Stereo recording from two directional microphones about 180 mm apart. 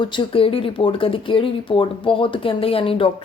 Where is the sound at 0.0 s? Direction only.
25° left (ahead or behind).